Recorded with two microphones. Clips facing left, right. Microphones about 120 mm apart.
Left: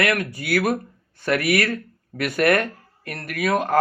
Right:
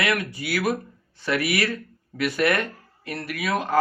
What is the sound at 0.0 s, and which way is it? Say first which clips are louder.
Speech: left 3 dB; 50° left (ahead or behind).